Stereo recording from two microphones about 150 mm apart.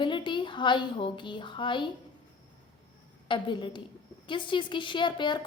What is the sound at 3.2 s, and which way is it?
A woman's voice, 35° left (ahead or behind).